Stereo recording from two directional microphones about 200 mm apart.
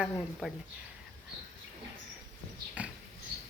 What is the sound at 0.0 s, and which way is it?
Speech, centre (ahead or behind).